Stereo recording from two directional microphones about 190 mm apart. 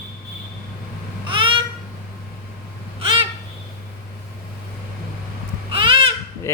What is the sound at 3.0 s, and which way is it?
Babbling, 25° right (ahead or behind).